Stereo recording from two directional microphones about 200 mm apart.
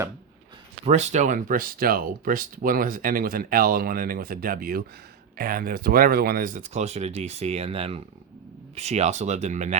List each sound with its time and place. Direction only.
0.9 s speech: 35° right (ahead or behind)